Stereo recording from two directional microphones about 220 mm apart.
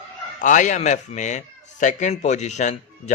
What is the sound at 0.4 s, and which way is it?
Speech, 35° left (ahead or behind).